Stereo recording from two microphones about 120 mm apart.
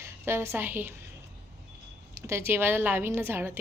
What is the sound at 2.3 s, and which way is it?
A woman's voice, 20° right (ahead or behind).